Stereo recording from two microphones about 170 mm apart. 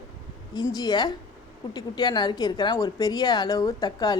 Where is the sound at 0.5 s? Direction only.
25° left (ahead or behind).